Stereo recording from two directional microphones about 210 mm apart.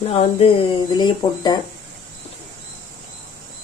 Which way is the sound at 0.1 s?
25° left (ahead or behind).